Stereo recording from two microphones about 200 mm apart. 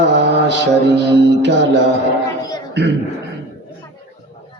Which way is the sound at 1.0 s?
60° right (ahead or behind).